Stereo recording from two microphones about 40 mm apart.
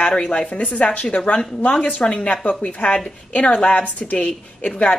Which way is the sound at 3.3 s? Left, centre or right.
Left.